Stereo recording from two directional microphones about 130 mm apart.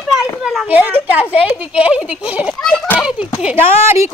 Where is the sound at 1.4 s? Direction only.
10° right (ahead or behind).